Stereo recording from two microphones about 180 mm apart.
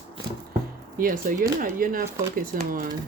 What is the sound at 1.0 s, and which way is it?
Speech, 55° right (ahead or behind).